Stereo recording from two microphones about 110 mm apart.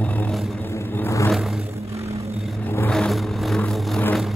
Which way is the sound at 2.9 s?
Centre (ahead or behind).